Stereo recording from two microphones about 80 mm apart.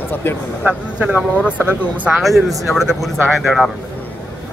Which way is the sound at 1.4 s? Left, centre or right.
Left.